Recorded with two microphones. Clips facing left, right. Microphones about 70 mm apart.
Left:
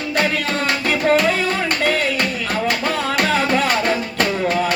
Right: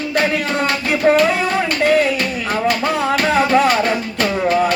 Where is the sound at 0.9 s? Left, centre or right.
Centre.